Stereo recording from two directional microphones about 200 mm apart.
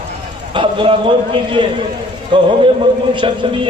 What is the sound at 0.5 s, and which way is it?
A man's voice, 25° right (ahead or behind).